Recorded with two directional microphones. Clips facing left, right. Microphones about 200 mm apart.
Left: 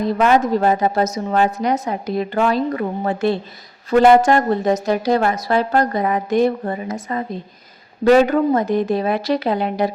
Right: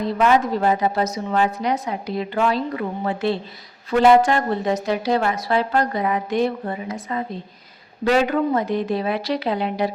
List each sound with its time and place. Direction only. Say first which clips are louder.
0.0 s a woman's voice: left 2 dB; 45° left (ahead or behind)